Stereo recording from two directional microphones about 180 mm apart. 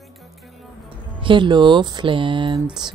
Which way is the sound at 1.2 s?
25° right (ahead or behind).